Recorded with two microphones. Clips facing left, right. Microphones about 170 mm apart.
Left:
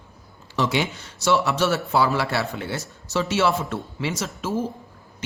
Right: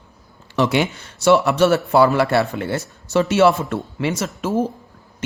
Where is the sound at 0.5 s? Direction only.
60° right (ahead or behind).